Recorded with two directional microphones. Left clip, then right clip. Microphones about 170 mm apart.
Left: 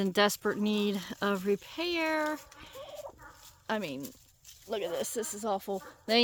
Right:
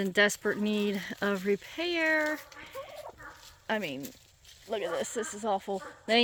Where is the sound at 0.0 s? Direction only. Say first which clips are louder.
Right 1 dB; 30° left (ahead or behind).